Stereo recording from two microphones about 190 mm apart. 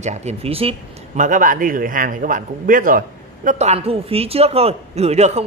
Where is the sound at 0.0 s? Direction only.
35° right (ahead or behind).